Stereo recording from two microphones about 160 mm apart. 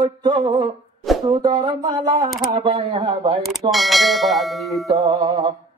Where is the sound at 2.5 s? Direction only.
35° right (ahead or behind).